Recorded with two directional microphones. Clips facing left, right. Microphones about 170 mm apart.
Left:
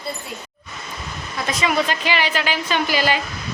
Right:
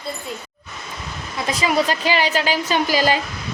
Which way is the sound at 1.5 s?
30° right (ahead or behind).